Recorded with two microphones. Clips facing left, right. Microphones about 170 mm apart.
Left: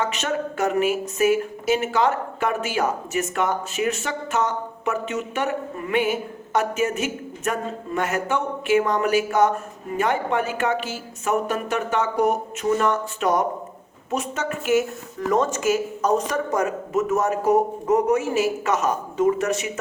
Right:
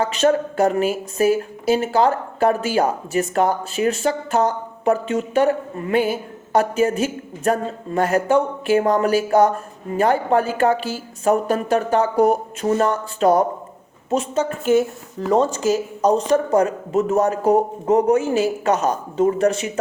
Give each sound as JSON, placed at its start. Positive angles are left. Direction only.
{"t": 0.0, "sound": "a woman's voice", "side_deg": -35}